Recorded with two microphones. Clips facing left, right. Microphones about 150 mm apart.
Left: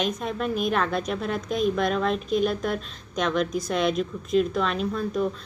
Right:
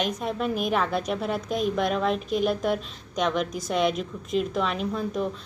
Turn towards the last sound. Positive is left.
turn(degrees=-15)  # may be behind; listen again after turning